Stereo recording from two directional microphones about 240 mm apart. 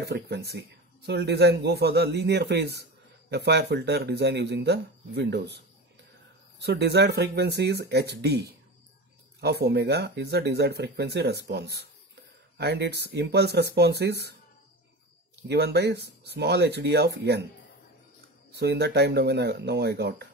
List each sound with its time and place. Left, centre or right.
0.0 s speech: right
6.6 s speech: right
15.4 s speech: right
18.5 s speech: right